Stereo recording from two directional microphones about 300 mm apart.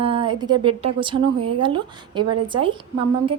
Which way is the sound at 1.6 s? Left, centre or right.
Centre.